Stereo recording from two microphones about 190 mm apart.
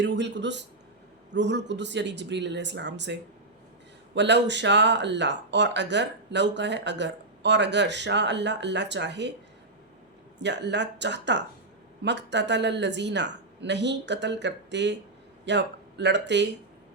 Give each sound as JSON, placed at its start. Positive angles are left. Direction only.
{"t": 0.0, "sound": "speech", "side_deg": -65}
{"t": 10.4, "sound": "speech", "side_deg": -65}